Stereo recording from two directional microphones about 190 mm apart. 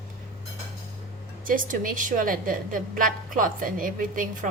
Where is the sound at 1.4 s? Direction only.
45° right (ahead or behind).